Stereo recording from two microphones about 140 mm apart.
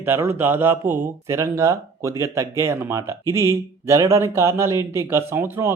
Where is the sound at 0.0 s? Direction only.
15° right (ahead or behind).